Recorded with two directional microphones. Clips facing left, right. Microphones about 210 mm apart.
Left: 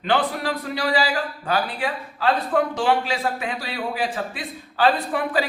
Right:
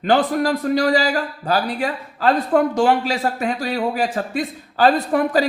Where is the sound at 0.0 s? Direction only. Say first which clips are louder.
Right 5 dB; 45° right (ahead or behind).